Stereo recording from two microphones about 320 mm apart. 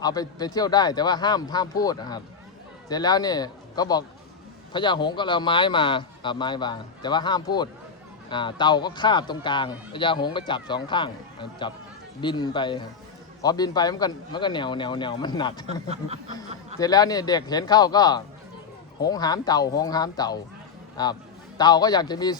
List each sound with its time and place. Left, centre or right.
0.0 s a man's voice: centre
15.6 s speech: centre
16.8 s a man's voice: centre